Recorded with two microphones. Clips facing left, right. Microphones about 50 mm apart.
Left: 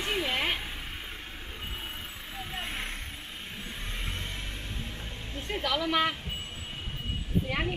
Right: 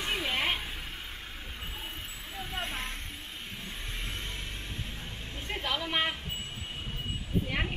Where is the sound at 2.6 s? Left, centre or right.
Centre.